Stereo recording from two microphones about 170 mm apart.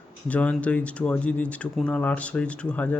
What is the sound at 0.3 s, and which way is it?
Speech, 10° left (ahead or behind).